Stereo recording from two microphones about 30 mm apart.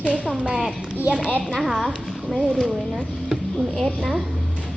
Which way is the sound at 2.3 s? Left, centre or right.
Centre.